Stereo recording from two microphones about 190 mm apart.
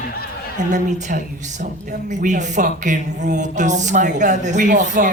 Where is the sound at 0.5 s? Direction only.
40° right (ahead or behind).